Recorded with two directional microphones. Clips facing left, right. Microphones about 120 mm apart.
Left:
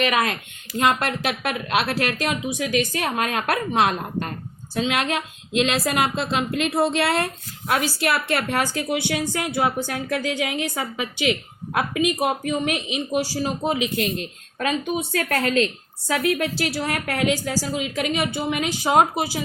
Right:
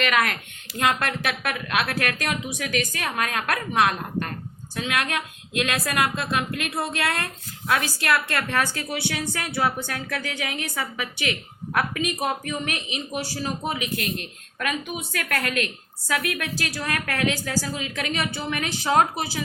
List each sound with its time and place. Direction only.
0.0 s a woman's voice: 20° left (ahead or behind)
1.4 s a woman's voice: 25° left (ahead or behind)